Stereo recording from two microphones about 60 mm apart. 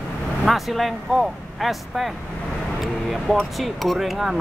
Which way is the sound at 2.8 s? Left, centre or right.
Centre.